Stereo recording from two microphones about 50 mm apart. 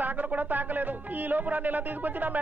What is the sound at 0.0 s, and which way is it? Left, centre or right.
Speech, right.